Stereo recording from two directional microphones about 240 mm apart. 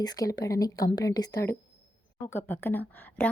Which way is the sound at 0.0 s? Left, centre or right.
Centre.